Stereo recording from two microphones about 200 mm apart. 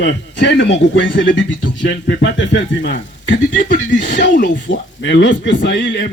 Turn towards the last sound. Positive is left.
turn(degrees=60)  # may be behind; listen again after turning